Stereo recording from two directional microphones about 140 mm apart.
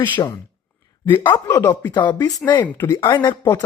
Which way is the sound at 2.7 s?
15° left (ahead or behind).